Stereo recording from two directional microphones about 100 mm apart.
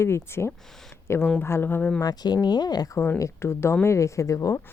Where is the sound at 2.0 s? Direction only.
40° left (ahead or behind).